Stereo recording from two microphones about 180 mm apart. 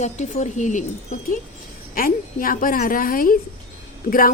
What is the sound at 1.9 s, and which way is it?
A woman's voice, 50° left (ahead or behind).